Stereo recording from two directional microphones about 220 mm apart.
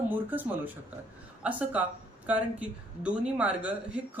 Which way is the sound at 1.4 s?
5° right (ahead or behind).